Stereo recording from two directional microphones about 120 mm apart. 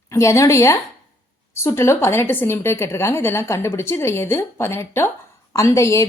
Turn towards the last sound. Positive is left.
turn(degrees=25)  # may be behind; listen again after turning